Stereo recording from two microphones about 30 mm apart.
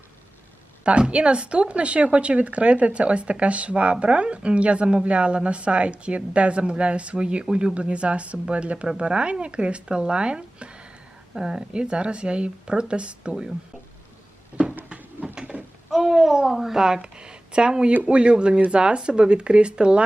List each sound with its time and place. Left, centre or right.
0.9 s a woman's voice: right
11.3 s speech: right
11.7 s a woman's voice: right
14.6 s cupboard open or close: right
15.2 s a sound: right
16.0 s speech: centre
17.0 s a woman's voice: right